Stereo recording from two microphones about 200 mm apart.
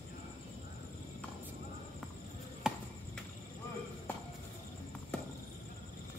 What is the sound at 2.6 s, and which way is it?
Chop, 5° right (ahead or behind).